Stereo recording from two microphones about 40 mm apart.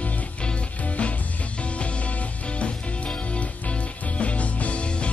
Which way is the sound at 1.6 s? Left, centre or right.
Left.